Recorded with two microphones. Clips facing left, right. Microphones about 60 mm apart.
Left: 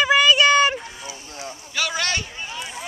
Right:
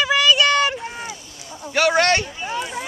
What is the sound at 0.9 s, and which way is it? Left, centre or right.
Boat, right.